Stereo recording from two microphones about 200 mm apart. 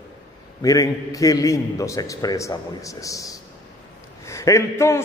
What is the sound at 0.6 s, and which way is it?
A man's voice, 15° left (ahead or behind).